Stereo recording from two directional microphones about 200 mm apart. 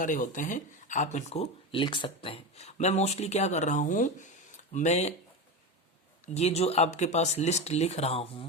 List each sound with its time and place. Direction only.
0.0 s speech: 40° left (ahead or behind)
6.2 s speech: 35° left (ahead or behind)